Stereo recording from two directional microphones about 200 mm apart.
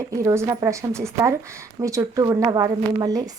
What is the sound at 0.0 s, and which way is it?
Speech, 15° right (ahead or behind).